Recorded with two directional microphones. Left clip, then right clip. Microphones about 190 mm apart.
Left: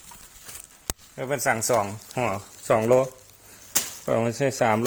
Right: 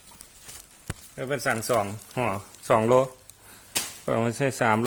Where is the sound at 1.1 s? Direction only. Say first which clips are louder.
Left 2 dB; centre (ahead or behind).